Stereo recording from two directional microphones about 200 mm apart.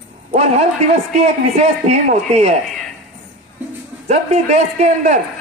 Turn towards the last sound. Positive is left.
turn(degrees=-35)  # may be behind; listen again after turning